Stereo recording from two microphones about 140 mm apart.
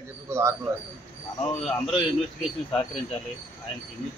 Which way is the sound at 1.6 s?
Centre (ahead or behind).